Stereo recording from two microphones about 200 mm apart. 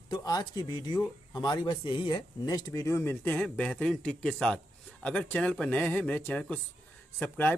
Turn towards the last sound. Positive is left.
turn(degrees=10)  # may be behind; listen again after turning